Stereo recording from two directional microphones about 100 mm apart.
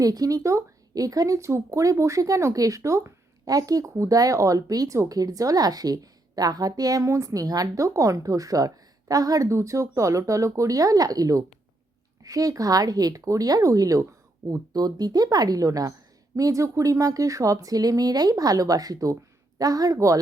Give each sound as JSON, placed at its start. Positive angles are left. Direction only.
{"t": 0.0, "sound": "speech", "side_deg": -40}